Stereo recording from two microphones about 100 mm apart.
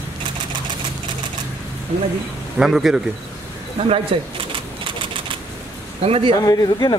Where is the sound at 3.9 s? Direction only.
60° right (ahead or behind).